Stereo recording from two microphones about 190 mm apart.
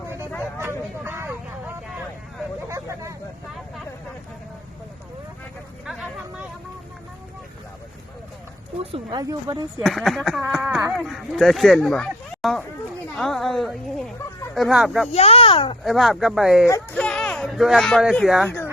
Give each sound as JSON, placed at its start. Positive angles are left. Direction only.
{"t": 0.6, "sound": "vehicle", "side_deg": -10}
{"t": 2.6, "sound": "hubbub", "side_deg": -15}
{"t": 5.8, "sound": "a sound", "side_deg": 0}
{"t": 8.8, "sound": "speech", "side_deg": -30}
{"t": 9.8, "sound": "speech", "side_deg": 0}
{"t": 10.6, "sound": "a sound", "side_deg": -10}
{"t": 10.9, "sound": "a woman's voice", "side_deg": 0}
{"t": 15.1, "sound": "speech", "side_deg": 30}
{"t": 15.8, "sound": "speech", "side_deg": 0}
{"t": 16.6, "sound": "speech", "side_deg": 10}